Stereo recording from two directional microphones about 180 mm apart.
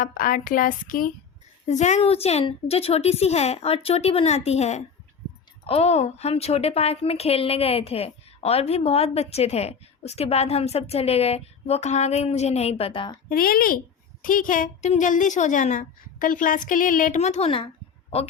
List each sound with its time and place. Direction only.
0.0 s a woman's voice: 50° left (ahead or behind); by 13.1 s 30° left (ahead or behind)
13.3 s a woman's voice: 55° left (ahead or behind); by 17.7 s 30° left (ahead or behind)